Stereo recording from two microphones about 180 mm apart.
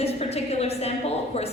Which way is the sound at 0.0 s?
35° left (ahead or behind).